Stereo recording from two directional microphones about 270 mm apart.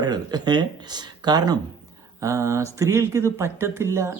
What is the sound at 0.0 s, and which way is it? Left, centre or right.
Speech, centre.